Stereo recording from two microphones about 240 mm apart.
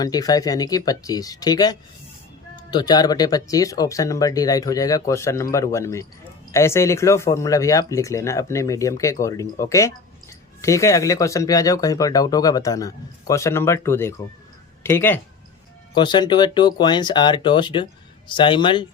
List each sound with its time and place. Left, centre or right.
0.0 s speech: centre